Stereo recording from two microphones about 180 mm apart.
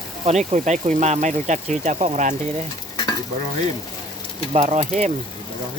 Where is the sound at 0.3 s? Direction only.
40° right (ahead or behind).